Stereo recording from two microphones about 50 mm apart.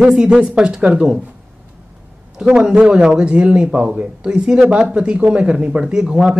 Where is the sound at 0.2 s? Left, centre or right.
Right.